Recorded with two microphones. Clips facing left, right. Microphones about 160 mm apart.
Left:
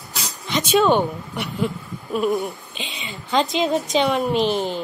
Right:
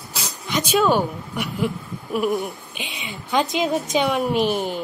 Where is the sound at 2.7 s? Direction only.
15° right (ahead or behind).